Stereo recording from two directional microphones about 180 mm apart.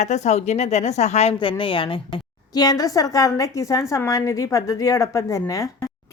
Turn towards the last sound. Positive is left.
turn(degrees=15)  # may be behind; listen again after turning